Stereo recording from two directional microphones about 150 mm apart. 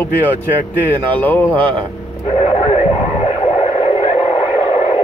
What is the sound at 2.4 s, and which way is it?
Radio, 40° left (ahead or behind).